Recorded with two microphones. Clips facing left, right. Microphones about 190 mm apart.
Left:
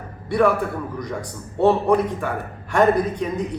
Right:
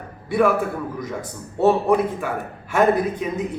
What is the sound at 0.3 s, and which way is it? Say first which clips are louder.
A man's voice: even; centre (ahead or behind).